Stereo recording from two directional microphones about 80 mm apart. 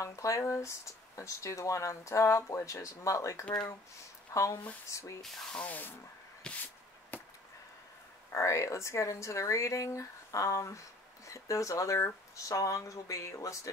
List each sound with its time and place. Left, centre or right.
0.0 s a woman's voice: left
5.2 s spray: centre
5.6 s speech: left
6.5 s a sound: centre
8.3 s speech: left